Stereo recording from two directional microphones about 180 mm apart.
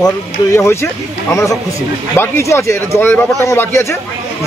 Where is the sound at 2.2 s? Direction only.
15° left (ahead or behind).